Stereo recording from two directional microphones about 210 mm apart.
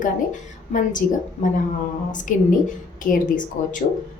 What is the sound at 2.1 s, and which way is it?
A woman's voice, 40° left (ahead or behind).